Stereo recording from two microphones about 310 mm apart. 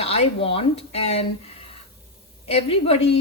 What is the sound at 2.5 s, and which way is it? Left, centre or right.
Speech, centre.